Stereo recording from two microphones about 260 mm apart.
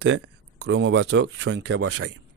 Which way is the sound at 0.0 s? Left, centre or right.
Right.